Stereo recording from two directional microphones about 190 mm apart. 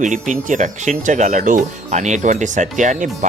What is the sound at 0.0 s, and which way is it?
Speech, 40° right (ahead or behind).